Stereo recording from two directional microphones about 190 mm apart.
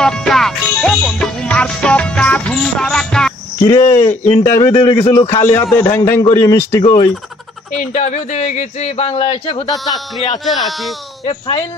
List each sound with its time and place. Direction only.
0.0 s music: 5° left (ahead or behind)
3.6 s a man's voice: 15° left (ahead or behind)
7.8 s speech: 40° left (ahead or behind)
10.4 s speech: centre (ahead or behind)
11.2 s speech: 30° left (ahead or behind)